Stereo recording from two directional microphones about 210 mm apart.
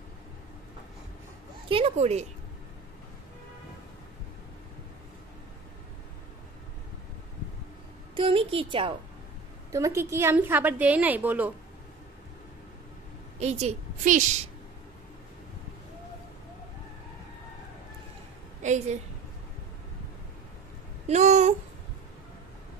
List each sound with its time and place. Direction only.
1.7 s a sound: 30° right (ahead or behind)
8.2 s a woman's voice: 25° right (ahead or behind); by 11.5 s 10° right (ahead or behind)
13.4 s a woman's voice: 30° right (ahead or behind)
18.6 s a woman's voice: 35° right (ahead or behind)
21.1 s a woman's voice: 35° right (ahead or behind)